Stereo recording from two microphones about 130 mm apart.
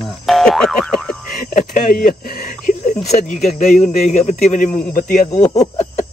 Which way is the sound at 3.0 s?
70° left (ahead or behind).